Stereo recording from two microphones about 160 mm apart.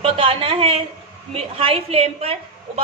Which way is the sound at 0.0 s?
35° right (ahead or behind).